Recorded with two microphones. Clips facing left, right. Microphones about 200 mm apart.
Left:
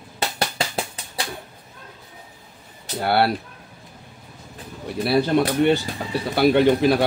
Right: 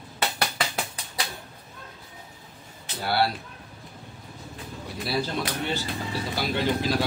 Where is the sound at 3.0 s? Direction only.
60° left (ahead or behind).